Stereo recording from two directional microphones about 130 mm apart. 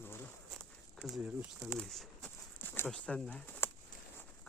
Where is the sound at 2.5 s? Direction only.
15° left (ahead or behind).